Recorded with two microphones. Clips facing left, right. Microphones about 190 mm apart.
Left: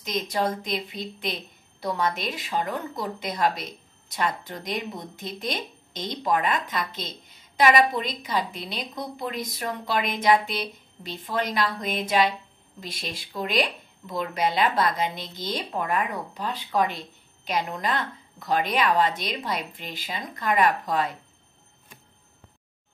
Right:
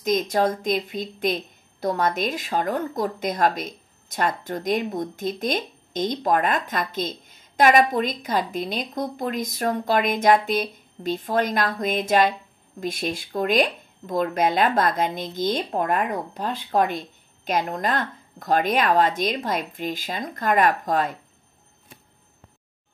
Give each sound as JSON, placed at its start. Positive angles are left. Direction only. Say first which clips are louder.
{"t": 0.0, "sound": "a woman's voice", "louder": "right 6 dB", "side_deg": -45}